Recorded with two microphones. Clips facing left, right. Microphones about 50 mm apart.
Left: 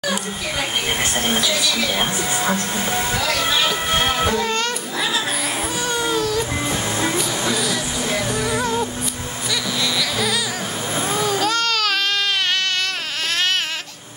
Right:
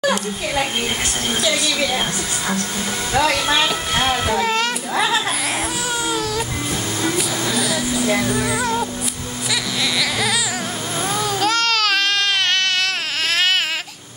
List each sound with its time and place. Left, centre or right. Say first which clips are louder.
2.0 s speech: left 2 dB; centre
3.2 s speech: right 7 dB; right
3.6 s music: even; centre
4.3 s a child's voice: right 2 dB; centre
5.9 s baby cry: left 3 dB; centre
7.2 s a sound: even; centre
8.1 s speech: right 1 dB; centre
9.9 s music: right 3 dB; centre
11.1 s a sound: right 1 dB; centre